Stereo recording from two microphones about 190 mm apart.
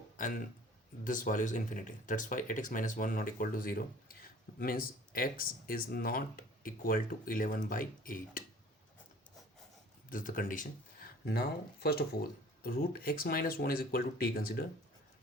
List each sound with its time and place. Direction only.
0.2 s speech: 45° left (ahead or behind)
10.1 s speech: 45° left (ahead or behind)